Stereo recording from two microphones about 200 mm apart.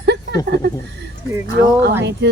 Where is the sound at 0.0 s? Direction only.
60° right (ahead or behind).